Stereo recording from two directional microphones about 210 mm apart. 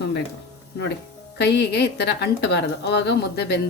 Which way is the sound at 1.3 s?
55° left (ahead or behind).